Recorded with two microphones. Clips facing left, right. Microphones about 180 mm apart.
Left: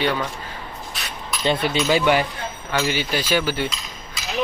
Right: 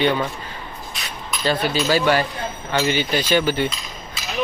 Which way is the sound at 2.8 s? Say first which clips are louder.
Right 2 dB; 5° left (ahead or behind).